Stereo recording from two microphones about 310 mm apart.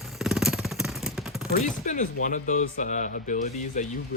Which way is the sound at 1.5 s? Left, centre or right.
Left.